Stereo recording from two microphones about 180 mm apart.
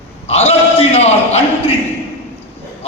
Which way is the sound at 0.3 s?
35° left (ahead or behind).